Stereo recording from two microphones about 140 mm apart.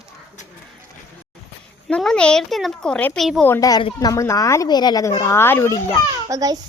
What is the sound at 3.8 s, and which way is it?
Speech, 30° left (ahead or behind).